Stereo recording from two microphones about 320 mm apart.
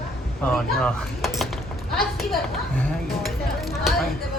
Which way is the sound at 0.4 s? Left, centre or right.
Centre.